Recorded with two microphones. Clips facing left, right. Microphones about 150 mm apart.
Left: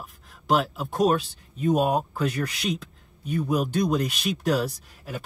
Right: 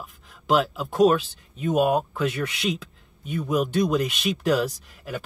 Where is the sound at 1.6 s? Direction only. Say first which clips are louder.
Right 1 dB; centre (ahead or behind).